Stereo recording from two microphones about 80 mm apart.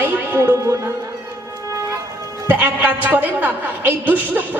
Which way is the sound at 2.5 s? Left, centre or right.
Right.